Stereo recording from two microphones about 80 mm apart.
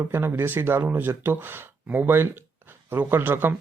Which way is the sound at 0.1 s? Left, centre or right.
Right.